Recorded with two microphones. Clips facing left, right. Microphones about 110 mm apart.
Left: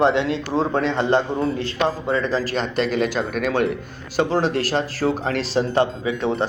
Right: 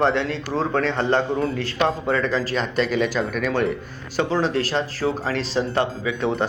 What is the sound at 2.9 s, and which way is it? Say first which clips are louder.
Speech: even; 50° left (ahead or behind).